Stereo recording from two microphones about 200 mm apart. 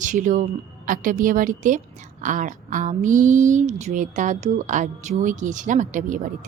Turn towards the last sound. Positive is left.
turn(degrees=-40)  # may be behind; listen again after turning